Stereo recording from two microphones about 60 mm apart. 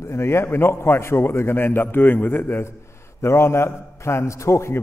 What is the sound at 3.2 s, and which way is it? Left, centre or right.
A man's voice, left.